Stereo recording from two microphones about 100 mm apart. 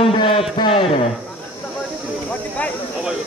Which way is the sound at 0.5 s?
55° left (ahead or behind).